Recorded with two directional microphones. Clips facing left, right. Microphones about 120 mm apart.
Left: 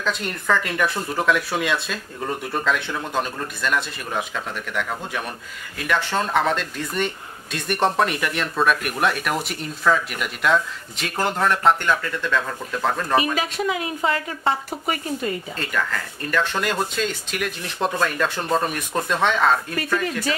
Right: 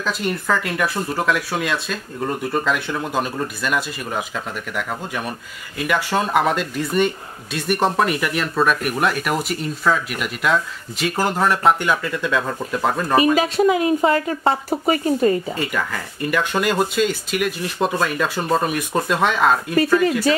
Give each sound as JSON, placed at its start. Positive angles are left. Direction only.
{"t": 0.0, "sound": "speech", "side_deg": -5}
{"t": 13.1, "sound": "speech", "side_deg": -35}
{"t": 15.5, "sound": "speech", "side_deg": -10}